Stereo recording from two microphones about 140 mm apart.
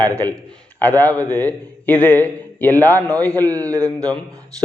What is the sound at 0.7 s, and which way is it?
A man's voice, 10° left (ahead or behind).